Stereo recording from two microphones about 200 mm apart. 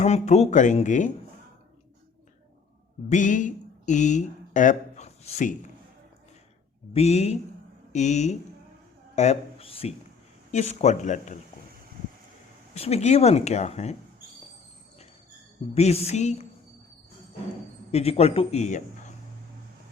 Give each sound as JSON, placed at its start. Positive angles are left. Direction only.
{"t": 0.0, "sound": "speech", "side_deg": 35}
{"t": 3.1, "sound": "speech", "side_deg": 40}
{"t": 6.9, "sound": "speech", "side_deg": 35}
{"t": 12.7, "sound": "speech", "side_deg": 30}
{"t": 15.7, "sound": "speech", "side_deg": 30}
{"t": 17.9, "sound": "speech", "side_deg": 30}